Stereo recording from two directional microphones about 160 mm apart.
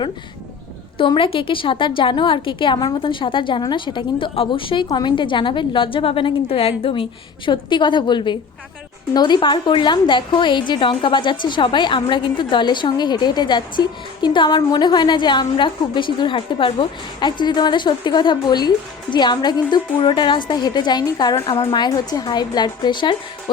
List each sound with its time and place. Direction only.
0.9 s a woman's voice: 35° left (ahead or behind)